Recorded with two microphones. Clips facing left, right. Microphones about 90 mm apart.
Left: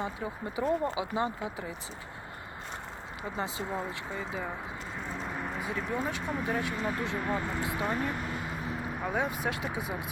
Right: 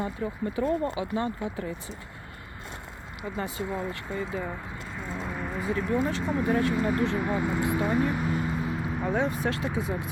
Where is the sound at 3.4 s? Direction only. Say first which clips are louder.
Right 3 dB; 20° left (ahead or behind).